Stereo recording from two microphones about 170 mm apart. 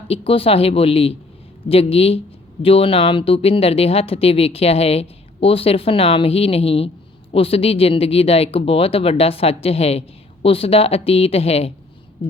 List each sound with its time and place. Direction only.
0.1 s speech: 35° left (ahead or behind)